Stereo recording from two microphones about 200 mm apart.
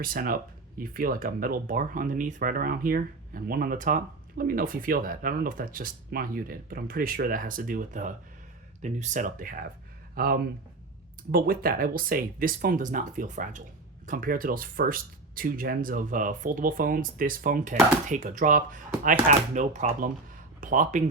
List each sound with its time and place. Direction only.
0.0 s speech: 45° right (ahead or behind)